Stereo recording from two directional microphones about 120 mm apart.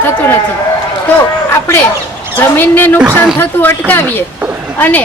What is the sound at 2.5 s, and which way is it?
A woman's voice, 15° left (ahead or behind).